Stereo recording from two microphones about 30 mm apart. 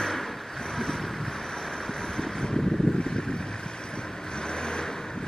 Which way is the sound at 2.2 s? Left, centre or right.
Left.